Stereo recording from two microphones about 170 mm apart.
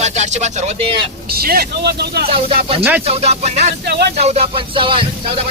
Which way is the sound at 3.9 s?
75° right (ahead or behind).